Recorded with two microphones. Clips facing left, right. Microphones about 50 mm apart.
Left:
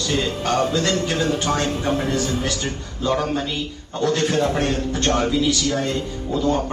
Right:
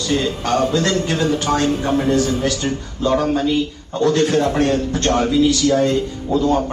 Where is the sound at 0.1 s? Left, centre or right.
Right.